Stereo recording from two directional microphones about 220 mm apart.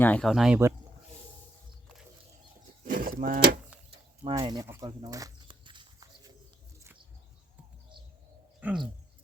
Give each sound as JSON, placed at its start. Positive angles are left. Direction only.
{"t": 0.0, "sound": "speech", "side_deg": 5}
{"t": 2.8, "sound": "livestock", "side_deg": -40}
{"t": 4.2, "sound": "a sound", "side_deg": -20}
{"t": 8.6, "sound": "speech", "side_deg": -5}